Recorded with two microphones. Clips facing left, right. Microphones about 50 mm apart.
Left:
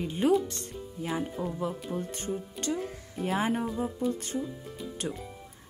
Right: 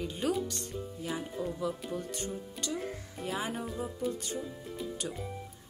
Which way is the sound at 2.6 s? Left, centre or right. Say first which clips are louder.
Left 5 dB; centre.